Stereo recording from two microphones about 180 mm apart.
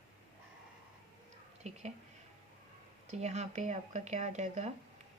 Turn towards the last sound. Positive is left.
turn(degrees=-40)  # may be behind; listen again after turning